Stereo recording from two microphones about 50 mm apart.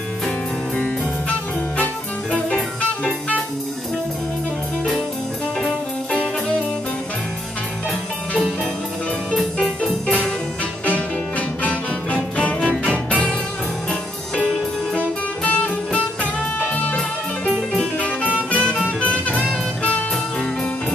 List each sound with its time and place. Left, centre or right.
2.3 s jazz: left
10.9 s music: left
15.4 s music: left
17.9 s music: left